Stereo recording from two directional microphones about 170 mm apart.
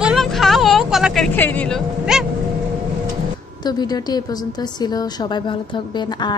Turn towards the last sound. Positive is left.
turn(degrees=25)  # may be behind; listen again after turning